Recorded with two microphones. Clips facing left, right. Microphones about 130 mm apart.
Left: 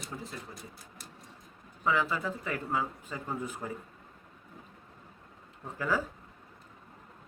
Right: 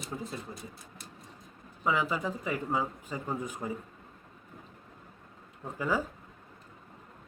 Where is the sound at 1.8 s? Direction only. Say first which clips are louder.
Even; 15° right (ahead or behind).